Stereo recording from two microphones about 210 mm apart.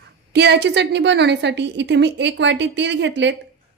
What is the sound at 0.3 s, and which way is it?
A woman's voice, 50° right (ahead or behind).